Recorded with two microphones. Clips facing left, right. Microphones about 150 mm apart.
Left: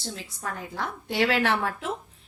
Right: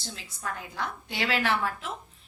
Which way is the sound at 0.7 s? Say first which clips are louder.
Left 3 dB; 50° left (ahead or behind).